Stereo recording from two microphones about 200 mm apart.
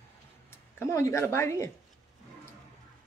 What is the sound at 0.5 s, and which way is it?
Speech, 15° left (ahead or behind).